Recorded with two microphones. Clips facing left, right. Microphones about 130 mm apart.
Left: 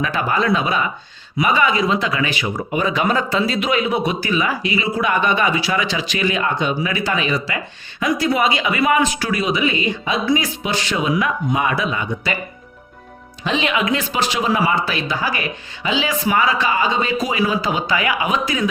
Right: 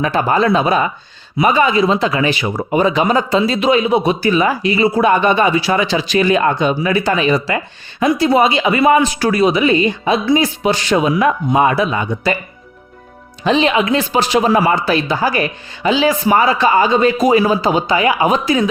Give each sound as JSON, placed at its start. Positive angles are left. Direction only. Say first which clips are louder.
{"t": 0.0, "sound": "speech", "louder": "right 5 dB", "side_deg": -35}
{"t": 10.6, "sound": "speech", "louder": "right 7 dB", "side_deg": -40}
{"t": 13.4, "sound": "speech", "louder": "right 6 dB", "side_deg": -35}
{"t": 14.9, "sound": "speech", "louder": "right 7 dB", "side_deg": -35}